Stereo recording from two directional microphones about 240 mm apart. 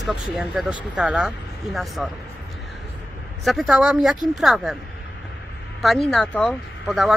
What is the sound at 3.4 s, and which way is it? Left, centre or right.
Speech, centre.